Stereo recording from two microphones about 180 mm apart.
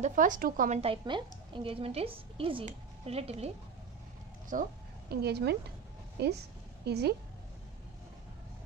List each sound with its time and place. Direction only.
0.0 s a woman's voice: 45° right (ahead or behind)
0.7 s a woman's voice: 30° right (ahead or behind)
4.5 s a woman's voice: 45° right (ahead or behind)
5.1 s a woman's voice: 65° right (ahead or behind)